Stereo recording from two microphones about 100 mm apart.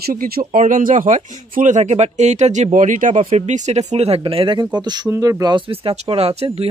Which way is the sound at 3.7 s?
90° right.